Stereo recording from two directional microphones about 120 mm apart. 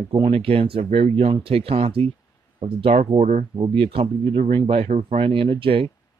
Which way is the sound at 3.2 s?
90° right.